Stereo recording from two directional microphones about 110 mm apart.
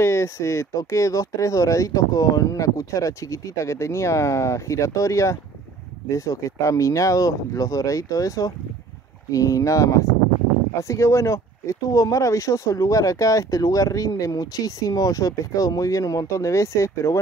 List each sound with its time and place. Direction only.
0.0 s speech: 25° left (ahead or behind)